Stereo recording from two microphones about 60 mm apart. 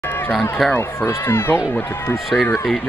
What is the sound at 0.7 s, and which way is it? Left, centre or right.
Speech, left.